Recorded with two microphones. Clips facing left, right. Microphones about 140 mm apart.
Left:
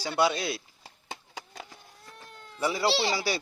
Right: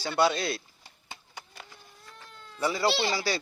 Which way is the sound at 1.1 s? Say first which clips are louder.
Left 4 dB; 90° left.